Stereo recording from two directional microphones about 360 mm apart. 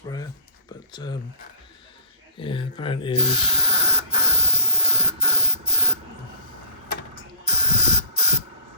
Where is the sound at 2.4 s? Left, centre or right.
Centre.